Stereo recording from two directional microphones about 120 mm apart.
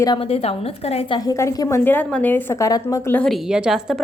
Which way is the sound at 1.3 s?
25° left (ahead or behind).